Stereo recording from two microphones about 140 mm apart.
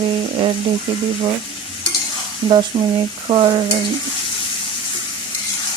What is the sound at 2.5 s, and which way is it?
Speech, 35° right (ahead or behind).